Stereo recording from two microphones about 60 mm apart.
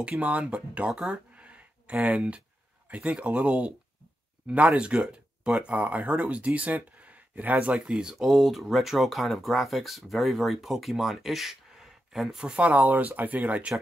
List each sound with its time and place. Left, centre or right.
0.2 s speech: right
1.3 s a sound: right
2.9 s speech: right
4.7 s speech: centre